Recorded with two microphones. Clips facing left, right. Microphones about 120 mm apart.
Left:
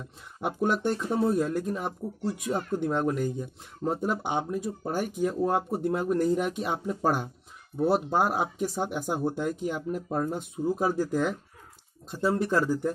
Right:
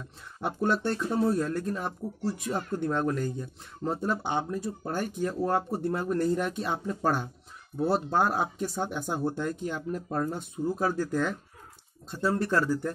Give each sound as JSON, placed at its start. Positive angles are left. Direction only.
{"t": 0.4, "sound": "speech", "side_deg": 15}